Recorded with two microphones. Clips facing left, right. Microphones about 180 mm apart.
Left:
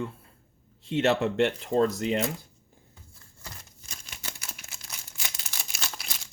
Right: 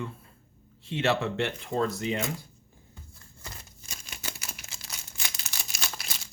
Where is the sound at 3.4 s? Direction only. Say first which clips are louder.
Even; 10° right (ahead or behind).